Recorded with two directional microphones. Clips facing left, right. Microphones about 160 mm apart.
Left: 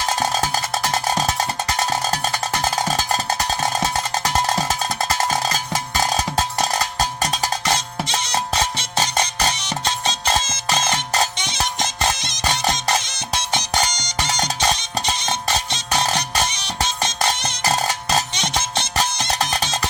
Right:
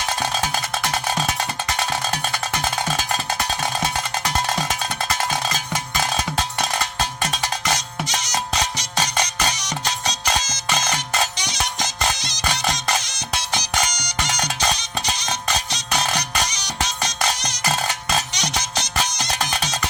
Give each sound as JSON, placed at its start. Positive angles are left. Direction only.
{"t": 1.9, "sound": "music", "side_deg": 35}
{"t": 4.2, "sound": "music", "side_deg": 35}
{"t": 8.0, "sound": "music", "side_deg": 30}
{"t": 17.7, "sound": "music", "side_deg": 35}
{"t": 18.3, "sound": "music", "side_deg": 25}